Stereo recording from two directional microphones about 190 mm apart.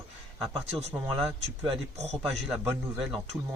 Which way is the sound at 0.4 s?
30° right (ahead or behind).